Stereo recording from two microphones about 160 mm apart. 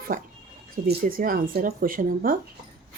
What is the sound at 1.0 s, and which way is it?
Speech, 60° right (ahead or behind).